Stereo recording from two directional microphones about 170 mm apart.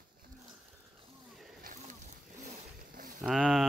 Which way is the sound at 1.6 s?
50° right (ahead or behind).